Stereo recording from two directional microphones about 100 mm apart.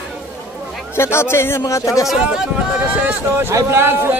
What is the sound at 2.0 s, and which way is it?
Speech, 5° right (ahead or behind).